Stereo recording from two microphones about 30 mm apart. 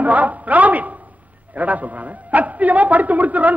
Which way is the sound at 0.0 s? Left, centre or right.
Right.